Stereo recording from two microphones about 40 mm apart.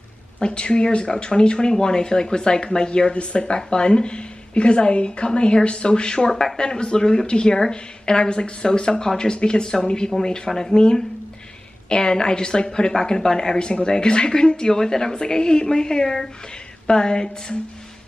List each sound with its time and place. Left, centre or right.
0.4 s speech: left
10.8 s speech: left